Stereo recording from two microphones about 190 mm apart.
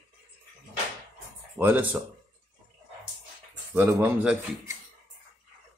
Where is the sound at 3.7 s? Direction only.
10° right (ahead or behind).